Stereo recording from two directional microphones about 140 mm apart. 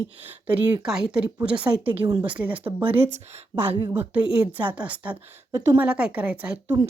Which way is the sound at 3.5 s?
15° right (ahead or behind).